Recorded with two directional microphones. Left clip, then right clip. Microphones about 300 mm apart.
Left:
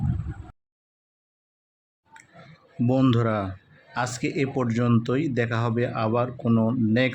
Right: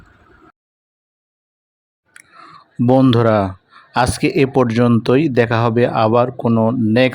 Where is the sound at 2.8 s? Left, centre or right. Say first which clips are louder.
Right 10 dB; right.